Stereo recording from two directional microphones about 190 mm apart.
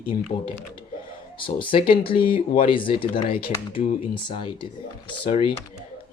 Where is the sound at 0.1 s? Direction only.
35° left (ahead or behind).